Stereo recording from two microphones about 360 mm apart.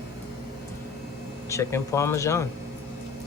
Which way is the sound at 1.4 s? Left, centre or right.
Centre.